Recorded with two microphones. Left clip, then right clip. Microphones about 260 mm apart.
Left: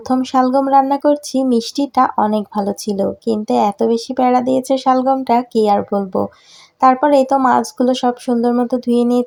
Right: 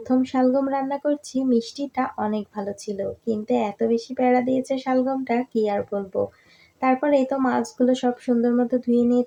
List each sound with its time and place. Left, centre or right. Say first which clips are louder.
0.1 s speech: left 6 dB; centre